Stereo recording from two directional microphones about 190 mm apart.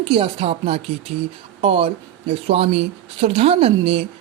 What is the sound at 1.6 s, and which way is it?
Speech, 30° right (ahead or behind).